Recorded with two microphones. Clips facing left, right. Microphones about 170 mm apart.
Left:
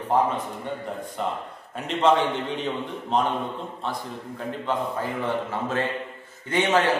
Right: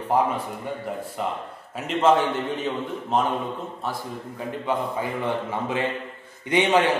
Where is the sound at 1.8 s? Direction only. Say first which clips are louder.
Right 1 dB; 5° right (ahead or behind).